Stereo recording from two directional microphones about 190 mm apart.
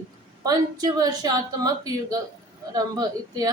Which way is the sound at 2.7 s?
20° right (ahead or behind).